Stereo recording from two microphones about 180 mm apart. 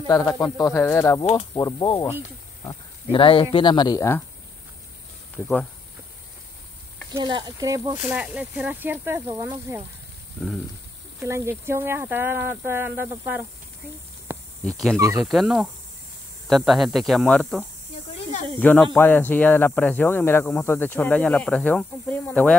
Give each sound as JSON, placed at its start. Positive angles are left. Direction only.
{"t": 0.0, "sound": "a man's voice", "side_deg": 20}
{"t": 7.1, "sound": "speech", "side_deg": -25}
{"t": 8.1, "sound": "speech", "side_deg": -5}
{"t": 11.2, "sound": "speech", "side_deg": -15}
{"t": 14.6, "sound": "speech", "side_deg": 5}
{"t": 15.0, "sound": "speech", "side_deg": -20}
{"t": 15.2, "sound": "speech", "side_deg": 0}